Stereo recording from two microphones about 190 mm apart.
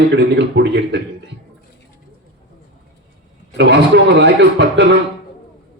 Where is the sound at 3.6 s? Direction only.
65° right (ahead or behind).